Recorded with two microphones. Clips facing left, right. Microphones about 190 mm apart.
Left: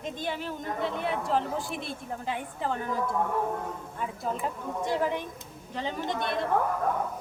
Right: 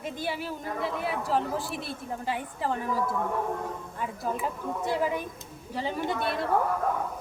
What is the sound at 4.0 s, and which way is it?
Speech, 5° right (ahead or behind).